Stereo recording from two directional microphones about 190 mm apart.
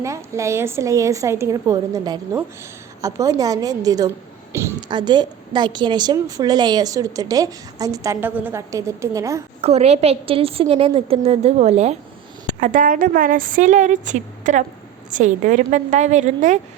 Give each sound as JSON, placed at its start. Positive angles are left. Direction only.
{"t": 0.0, "sound": "a woman's voice", "side_deg": -15}
{"t": 9.6, "sound": "a woman's voice", "side_deg": -35}